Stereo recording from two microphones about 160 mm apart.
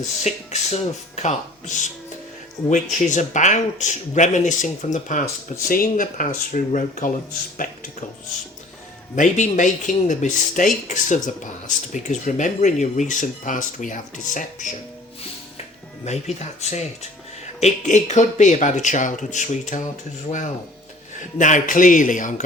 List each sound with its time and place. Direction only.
0.2 s speech: 45° left (ahead or behind)
5.6 s speech: 60° left (ahead or behind)
9.1 s speech: 50° left (ahead or behind)
16.0 s speech: 45° left (ahead or behind)
21.2 s speech: 50° left (ahead or behind)